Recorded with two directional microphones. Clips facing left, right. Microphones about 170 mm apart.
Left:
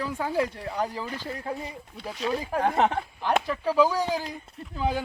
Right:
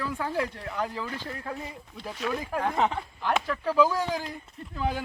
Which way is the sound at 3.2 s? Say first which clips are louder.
Left 2 dB; 10° left (ahead or behind).